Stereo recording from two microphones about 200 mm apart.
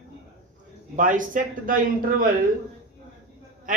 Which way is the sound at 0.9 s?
40° right (ahead or behind).